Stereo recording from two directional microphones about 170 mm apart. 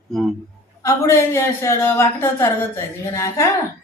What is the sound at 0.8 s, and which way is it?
A woman's voice, 15° left (ahead or behind).